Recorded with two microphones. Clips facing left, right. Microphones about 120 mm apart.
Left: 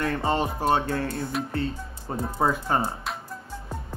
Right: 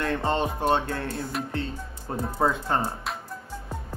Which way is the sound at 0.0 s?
5° left (ahead or behind).